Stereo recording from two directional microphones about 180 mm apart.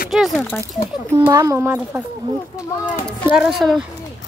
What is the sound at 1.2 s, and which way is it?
Speech, 20° right (ahead or behind).